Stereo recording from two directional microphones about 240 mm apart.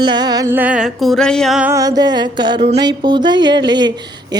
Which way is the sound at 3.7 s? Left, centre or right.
Centre.